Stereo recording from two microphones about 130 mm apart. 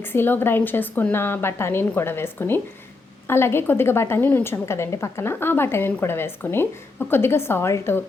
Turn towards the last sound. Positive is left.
turn(degrees=20)  # may be behind; listen again after turning